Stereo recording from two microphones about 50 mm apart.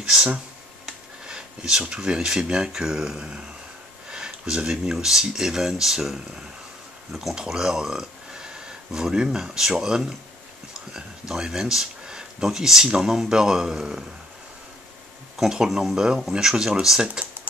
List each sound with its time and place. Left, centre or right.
0.1 s speech: centre
15.3 s speech: centre